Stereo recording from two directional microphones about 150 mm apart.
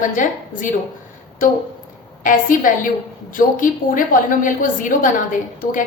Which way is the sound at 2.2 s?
65° left (ahead or behind).